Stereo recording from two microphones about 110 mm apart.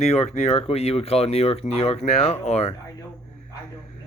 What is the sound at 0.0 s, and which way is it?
Speech, 75° left (ahead or behind).